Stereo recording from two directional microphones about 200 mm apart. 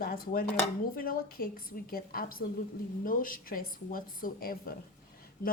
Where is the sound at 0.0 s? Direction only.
45° left (ahead or behind).